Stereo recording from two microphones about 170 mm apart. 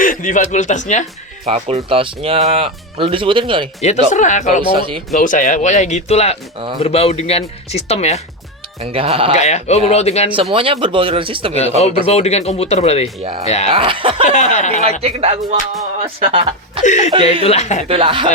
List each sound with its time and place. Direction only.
0.0 s speech: 50° left (ahead or behind)
1.5 s speech: 35° right (ahead or behind)
3.8 s speech: 40° left (ahead or behind)
4.7 s speech: 30° right (ahead or behind)
5.1 s speech: 50° left (ahead or behind)
8.8 s speech: 35° right (ahead or behind)
9.3 s speech: 40° left (ahead or behind)
10.3 s speech: 30° right (ahead or behind)
12.0 s speech: 40° left (ahead or behind)
13.7 s speech: 30° right (ahead or behind)
14.3 s speech: 45° left (ahead or behind)
15.0 s speech: 35° right (ahead or behind)
16.8 s speech: 45° left (ahead or behind)
17.8 s speech: 35° right (ahead or behind)